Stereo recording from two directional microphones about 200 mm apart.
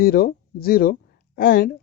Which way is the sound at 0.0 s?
45° left (ahead or behind).